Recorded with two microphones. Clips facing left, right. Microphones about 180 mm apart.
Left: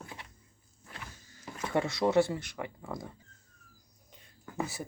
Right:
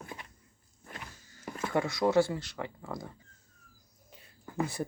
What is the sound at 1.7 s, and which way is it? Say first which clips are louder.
Speech: even; 25° left (ahead or behind).